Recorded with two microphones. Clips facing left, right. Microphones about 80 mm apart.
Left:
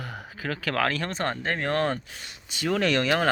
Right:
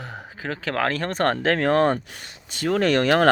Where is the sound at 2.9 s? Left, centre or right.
Right.